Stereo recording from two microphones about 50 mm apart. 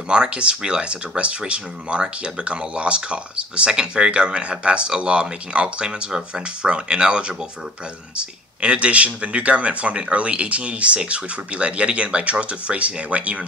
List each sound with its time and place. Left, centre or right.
0.1 s speech: centre